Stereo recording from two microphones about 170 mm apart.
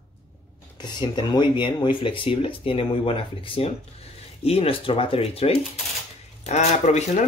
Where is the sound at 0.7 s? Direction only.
25° left (ahead or behind).